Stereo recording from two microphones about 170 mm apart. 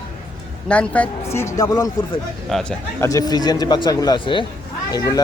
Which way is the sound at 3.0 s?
20° left (ahead or behind).